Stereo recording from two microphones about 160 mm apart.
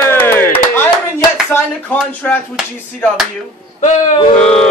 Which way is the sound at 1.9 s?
10° left (ahead or behind).